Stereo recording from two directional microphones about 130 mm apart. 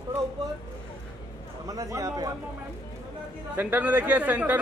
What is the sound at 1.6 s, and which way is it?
Speech, 25° right (ahead or behind).